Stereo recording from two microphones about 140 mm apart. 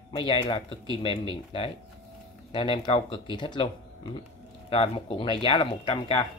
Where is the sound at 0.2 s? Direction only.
35° left (ahead or behind).